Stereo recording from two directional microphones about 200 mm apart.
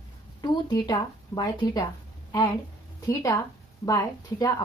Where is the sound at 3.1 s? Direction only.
15° left (ahead or behind).